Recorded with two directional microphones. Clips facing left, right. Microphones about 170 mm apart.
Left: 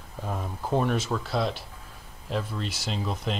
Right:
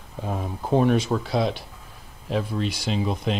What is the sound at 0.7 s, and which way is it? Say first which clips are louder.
Speech: right 6 dB; centre (ahead or behind).